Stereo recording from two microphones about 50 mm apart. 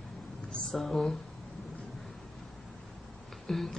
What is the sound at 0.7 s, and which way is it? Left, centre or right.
Speech, centre.